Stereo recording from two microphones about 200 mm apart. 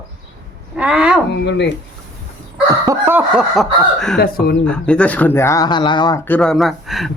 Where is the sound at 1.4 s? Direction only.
60° left (ahead or behind).